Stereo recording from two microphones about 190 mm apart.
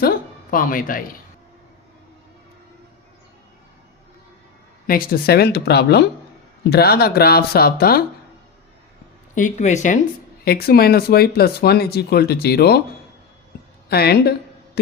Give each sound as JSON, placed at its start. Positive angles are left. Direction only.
{"t": 0.5, "sound": "speech", "side_deg": 45}
{"t": 4.9, "sound": "speech", "side_deg": 50}
{"t": 9.3, "sound": "speech", "side_deg": 40}
{"t": 10.4, "sound": "speech", "side_deg": 55}
{"t": 13.9, "sound": "speech", "side_deg": 55}